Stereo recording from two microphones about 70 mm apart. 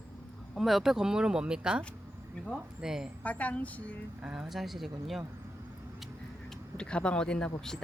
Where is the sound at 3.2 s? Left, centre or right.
Left.